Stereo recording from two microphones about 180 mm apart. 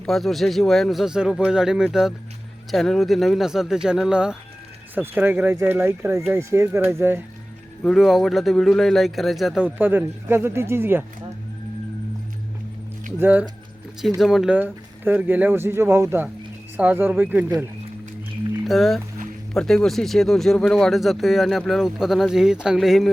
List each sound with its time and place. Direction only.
0.0 s speech: centre (ahead or behind)
7.9 s speech: centre (ahead or behind)
13.1 s speech: 10° right (ahead or behind)